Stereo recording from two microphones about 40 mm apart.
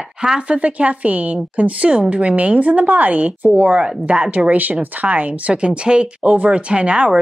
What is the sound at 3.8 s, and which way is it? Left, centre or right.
A woman's voice, right.